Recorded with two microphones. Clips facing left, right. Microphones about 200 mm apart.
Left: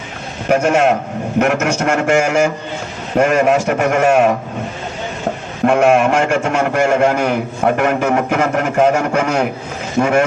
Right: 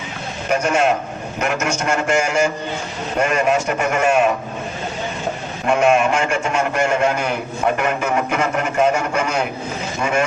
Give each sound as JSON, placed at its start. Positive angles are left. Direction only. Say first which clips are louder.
{"t": 0.4, "sound": "a man's voice", "louder": "left 5 dB", "side_deg": 55}
{"t": 1.8, "sound": "a man's voice", "louder": "left 4 dB", "side_deg": 70}
{"t": 5.6, "sound": "a man's voice", "louder": "left 4 dB", "side_deg": 60}